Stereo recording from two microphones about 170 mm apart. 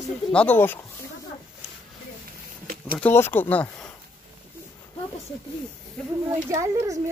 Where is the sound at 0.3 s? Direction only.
10° left (ahead or behind).